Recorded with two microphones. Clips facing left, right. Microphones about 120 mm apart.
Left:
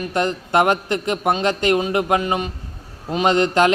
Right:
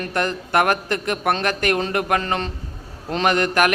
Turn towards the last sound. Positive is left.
turn(degrees=20)  # may be behind; listen again after turning